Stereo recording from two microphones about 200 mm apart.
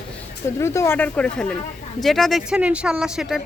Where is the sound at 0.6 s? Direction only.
15° left (ahead or behind).